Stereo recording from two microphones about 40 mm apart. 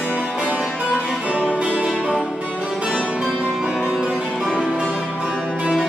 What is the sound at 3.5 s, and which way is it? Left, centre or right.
Music, centre.